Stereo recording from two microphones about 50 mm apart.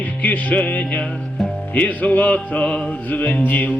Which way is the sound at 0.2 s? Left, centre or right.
Left.